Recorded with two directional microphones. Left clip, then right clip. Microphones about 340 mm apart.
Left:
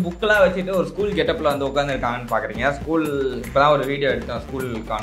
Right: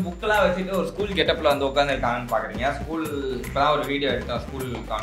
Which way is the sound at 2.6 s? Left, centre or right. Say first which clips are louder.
Left 5 dB; left.